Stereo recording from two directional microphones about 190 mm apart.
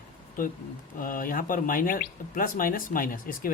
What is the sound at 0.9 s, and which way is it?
A man's voice, 45° left (ahead or behind).